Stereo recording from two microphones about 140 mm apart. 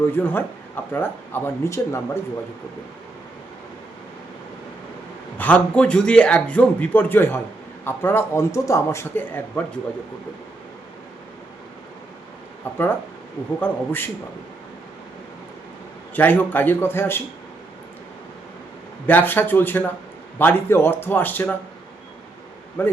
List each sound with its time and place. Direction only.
0.2 s a man's voice: 15° left (ahead or behind)
5.4 s a man's voice: 10° left (ahead or behind)
12.7 s a man's voice: 15° left (ahead or behind)
16.1 s a man's voice: 15° left (ahead or behind)
19.0 s a man's voice: 15° left (ahead or behind)
22.8 s a man's voice: 15° left (ahead or behind)